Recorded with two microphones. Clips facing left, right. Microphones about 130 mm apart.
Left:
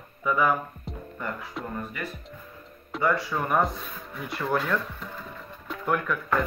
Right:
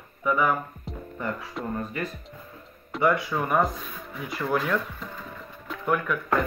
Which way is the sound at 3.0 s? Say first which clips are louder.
Right 2 dB; 15° right (ahead or behind).